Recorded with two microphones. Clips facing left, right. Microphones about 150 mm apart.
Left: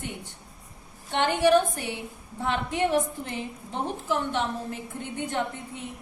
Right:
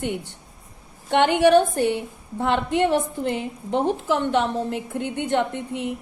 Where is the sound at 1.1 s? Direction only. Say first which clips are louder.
Right 5 dB; 65° right (ahead or behind).